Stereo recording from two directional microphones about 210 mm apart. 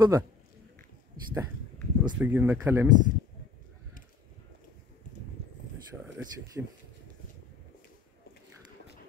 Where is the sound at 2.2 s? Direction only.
5° right (ahead or behind).